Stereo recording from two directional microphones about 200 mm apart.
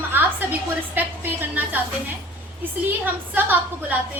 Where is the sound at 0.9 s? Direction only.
10° right (ahead or behind).